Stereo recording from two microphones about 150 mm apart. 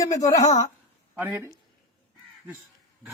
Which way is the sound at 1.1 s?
15° right (ahead or behind).